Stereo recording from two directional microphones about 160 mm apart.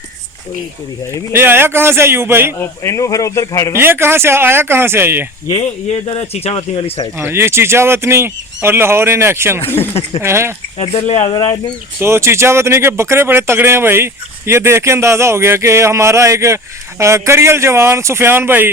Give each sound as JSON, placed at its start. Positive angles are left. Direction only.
{"t": 1.3, "sound": "speech", "side_deg": -15}
{"t": 2.6, "sound": "speech", "side_deg": 20}
{"t": 3.8, "sound": "speech", "side_deg": -15}
{"t": 5.5, "sound": "speech", "side_deg": 35}
{"t": 7.2, "sound": "speech", "side_deg": -15}
{"t": 9.6, "sound": "speech", "side_deg": 10}
{"t": 10.2, "sound": "speech", "side_deg": -15}
{"t": 10.8, "sound": "speech", "side_deg": 40}
{"t": 11.9, "sound": "speech", "side_deg": -15}